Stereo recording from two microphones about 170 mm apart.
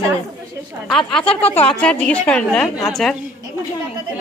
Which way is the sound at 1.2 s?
35° left (ahead or behind).